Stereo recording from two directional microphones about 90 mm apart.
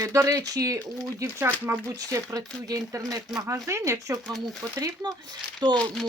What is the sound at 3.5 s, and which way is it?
Speech, 30° right (ahead or behind).